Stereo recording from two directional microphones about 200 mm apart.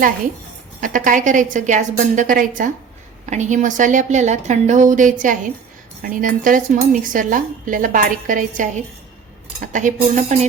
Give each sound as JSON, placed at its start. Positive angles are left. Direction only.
{"t": 0.8, "sound": "a woman's voice", "side_deg": -40}